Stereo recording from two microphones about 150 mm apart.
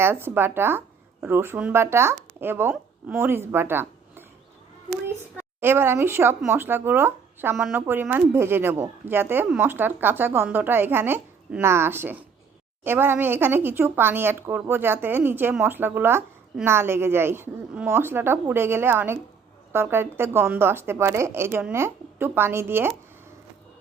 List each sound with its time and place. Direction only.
0.0 s a woman's voice: 15° right (ahead or behind)
5.4 s a woman's voice: 15° right (ahead or behind)